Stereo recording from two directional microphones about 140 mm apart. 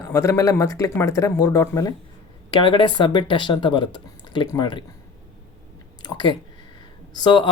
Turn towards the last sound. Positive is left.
turn(degrees=30)  # may be behind; listen again after turning